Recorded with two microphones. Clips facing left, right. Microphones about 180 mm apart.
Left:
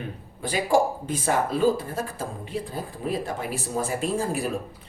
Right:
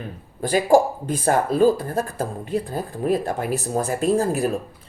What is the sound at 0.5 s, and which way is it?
Speech, 50° right (ahead or behind).